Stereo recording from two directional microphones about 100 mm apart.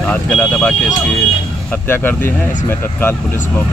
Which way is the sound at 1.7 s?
20° left (ahead or behind).